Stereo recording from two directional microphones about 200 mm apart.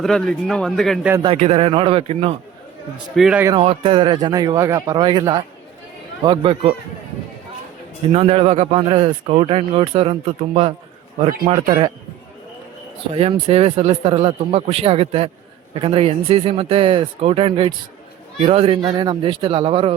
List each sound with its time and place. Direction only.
0.0 s speech: centre (ahead or behind)
1.1 s a man's voice: 25° right (ahead or behind)
3.2 s speech: 5° right (ahead or behind)
3.6 s a man's voice: 25° right (ahead or behind)
8.1 s a man's voice: 30° right (ahead or behind)
13.1 s a man's voice: 30° right (ahead or behind)